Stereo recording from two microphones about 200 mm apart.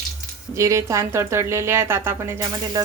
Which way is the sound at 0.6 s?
15° right (ahead or behind).